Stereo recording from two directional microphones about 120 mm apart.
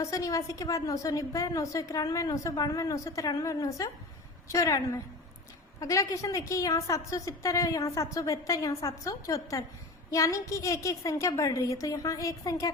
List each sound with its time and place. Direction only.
0.0 s a woman's voice: 25° left (ahead or behind)